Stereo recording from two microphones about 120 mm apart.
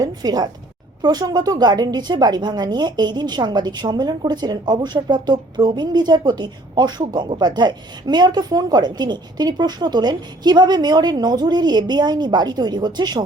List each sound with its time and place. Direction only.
0.0 s a woman's voice: 35° right (ahead or behind)